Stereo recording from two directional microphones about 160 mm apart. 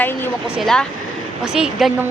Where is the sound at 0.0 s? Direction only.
15° left (ahead or behind).